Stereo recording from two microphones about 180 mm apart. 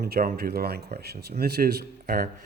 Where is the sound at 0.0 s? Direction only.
55° right (ahead or behind).